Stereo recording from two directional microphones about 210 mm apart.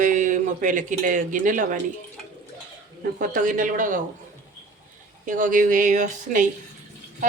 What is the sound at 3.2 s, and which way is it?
Speech, 40° right (ahead or behind).